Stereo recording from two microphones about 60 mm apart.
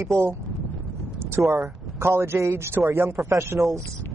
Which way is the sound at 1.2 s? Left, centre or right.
Right.